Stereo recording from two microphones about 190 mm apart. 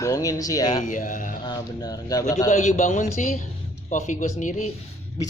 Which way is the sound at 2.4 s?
40° left (ahead or behind).